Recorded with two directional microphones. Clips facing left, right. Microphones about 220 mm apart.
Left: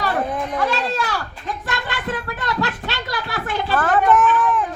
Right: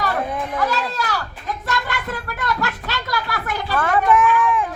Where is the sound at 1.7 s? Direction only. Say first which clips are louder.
Even; 25° left (ahead or behind).